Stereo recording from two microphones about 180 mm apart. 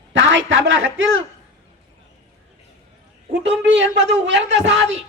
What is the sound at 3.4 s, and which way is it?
Speech, 90° right.